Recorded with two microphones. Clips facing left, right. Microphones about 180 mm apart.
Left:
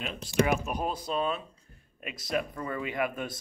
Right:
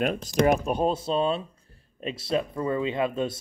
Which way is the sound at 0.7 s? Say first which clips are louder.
Right 7 dB; 25° right (ahead or behind).